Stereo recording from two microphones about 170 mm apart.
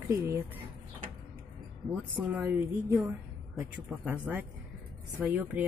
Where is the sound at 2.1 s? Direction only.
10° right (ahead or behind).